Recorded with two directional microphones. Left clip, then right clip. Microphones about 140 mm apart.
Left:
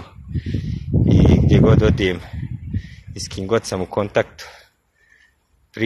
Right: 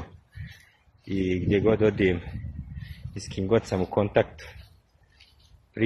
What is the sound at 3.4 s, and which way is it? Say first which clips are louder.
Speech: left 4 dB; 20° left (ahead or behind).